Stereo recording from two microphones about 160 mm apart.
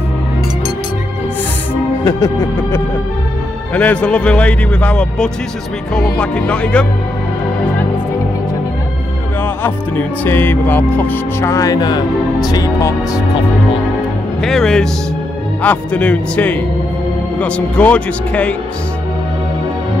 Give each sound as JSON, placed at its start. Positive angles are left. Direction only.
{"t": 2.0, "sound": "speech", "side_deg": 20}
{"t": 9.4, "sound": "speech", "side_deg": 10}
{"t": 14.4, "sound": "speech", "side_deg": 5}